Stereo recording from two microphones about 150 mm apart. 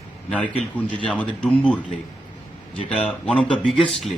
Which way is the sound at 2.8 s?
5° left (ahead or behind).